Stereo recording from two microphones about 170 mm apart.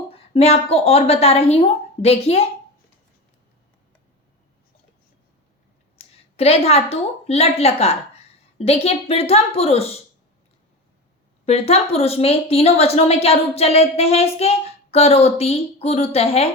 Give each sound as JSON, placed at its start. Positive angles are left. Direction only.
{"t": 0.1, "sound": "a woman's voice", "side_deg": 35}
{"t": 6.0, "sound": "a woman's voice", "side_deg": 35}
{"t": 11.4, "sound": "a woman's voice", "side_deg": 35}